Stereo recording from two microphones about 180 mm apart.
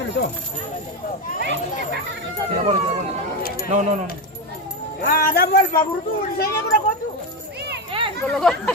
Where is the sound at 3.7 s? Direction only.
40° right (ahead or behind).